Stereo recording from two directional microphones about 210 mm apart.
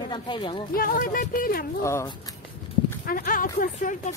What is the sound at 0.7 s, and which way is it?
Speech, 45° left (ahead or behind).